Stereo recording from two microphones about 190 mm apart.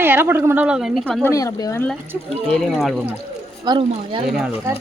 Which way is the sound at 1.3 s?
20° left (ahead or behind).